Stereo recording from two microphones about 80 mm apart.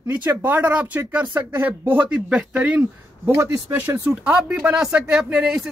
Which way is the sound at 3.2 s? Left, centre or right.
Right.